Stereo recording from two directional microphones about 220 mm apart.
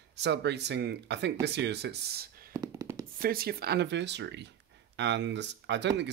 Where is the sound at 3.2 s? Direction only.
45° right (ahead or behind).